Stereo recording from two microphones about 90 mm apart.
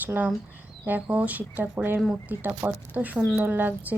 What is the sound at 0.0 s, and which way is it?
A woman's voice, 20° right (ahead or behind).